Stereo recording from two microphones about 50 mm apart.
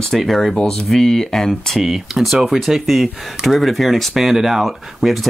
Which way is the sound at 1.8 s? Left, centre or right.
Centre.